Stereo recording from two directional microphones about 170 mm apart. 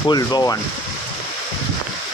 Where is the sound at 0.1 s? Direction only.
25° left (ahead or behind).